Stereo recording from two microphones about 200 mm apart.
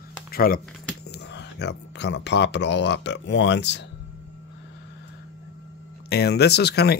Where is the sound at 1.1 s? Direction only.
60° left (ahead or behind).